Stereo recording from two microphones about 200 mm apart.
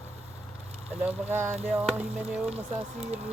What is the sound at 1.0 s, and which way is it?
Speech, 10° right (ahead or behind).